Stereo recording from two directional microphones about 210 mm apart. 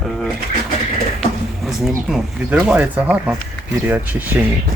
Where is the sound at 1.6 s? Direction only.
Centre (ahead or behind).